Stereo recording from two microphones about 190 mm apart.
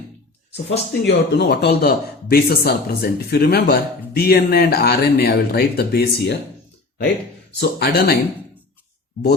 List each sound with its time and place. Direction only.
1.0 s speech: 60° left (ahead or behind)
7.6 s speech: 60° left (ahead or behind)